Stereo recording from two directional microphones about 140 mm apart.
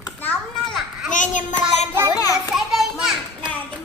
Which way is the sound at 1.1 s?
65° left (ahead or behind).